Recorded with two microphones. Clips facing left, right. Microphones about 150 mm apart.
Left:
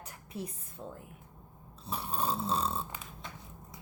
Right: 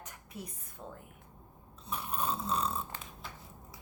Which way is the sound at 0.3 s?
30° left (ahead or behind).